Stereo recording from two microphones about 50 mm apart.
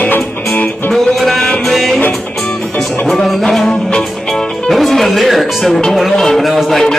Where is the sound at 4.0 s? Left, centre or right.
Centre.